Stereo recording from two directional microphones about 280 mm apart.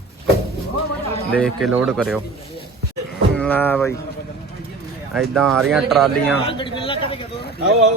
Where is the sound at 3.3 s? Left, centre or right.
Centre.